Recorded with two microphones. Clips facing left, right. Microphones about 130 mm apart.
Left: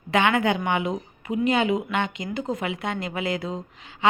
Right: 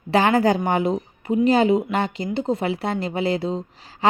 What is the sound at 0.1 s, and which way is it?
A woman's voice, 35° right (ahead or behind).